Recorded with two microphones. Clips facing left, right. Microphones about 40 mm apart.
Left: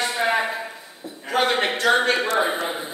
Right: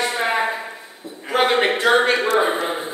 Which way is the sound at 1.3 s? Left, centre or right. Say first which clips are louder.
Right 4 dB; centre.